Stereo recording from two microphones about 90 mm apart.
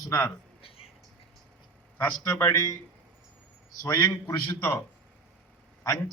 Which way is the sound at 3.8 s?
40° left (ahead or behind).